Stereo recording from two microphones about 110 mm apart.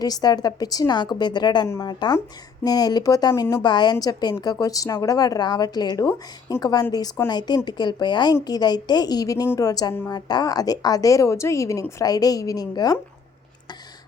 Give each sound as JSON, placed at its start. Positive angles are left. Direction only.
{"t": 0.0, "sound": "a woman's voice", "side_deg": 35}
{"t": 1.6, "sound": "speech", "side_deg": 30}
{"t": 1.9, "sound": "a woman's voice", "side_deg": 40}